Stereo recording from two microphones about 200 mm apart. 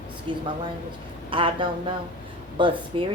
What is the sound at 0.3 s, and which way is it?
A woman's voice, 25° right (ahead or behind).